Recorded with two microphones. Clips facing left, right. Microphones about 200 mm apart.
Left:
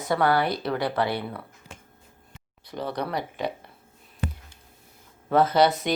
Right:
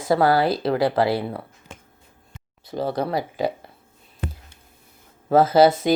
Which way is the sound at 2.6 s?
30° right (ahead or behind).